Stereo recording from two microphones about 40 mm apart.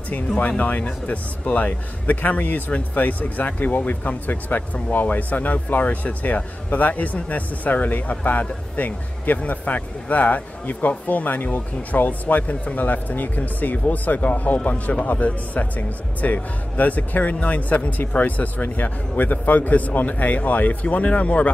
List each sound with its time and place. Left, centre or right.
0.4 s speech: left
20.8 s speech: left